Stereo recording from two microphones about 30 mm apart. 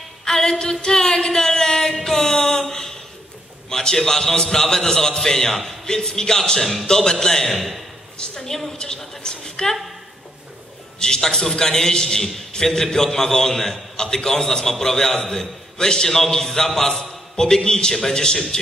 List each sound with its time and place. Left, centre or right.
0.2 s a sound: centre
3.7 s a man's voice: centre
6.6 s a man's voice: centre
7.1 s a woman's voice: centre
7.5 s a man's voice: centre
8.4 s a man's voice: centre
11.0 s a man's voice: left